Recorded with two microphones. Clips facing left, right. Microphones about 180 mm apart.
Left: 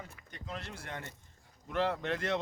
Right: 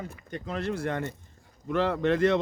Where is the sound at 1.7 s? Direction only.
90° right.